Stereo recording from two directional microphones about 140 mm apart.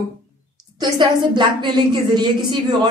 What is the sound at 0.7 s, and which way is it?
Speech, 35° right (ahead or behind).